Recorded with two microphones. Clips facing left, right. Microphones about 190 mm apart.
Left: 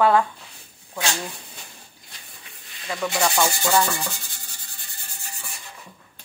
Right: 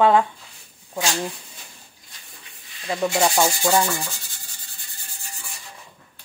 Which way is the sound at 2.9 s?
25° right (ahead or behind).